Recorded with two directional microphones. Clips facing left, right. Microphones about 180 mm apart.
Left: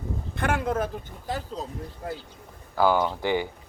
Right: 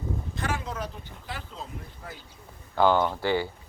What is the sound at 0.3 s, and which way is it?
Speech, 55° left (ahead or behind).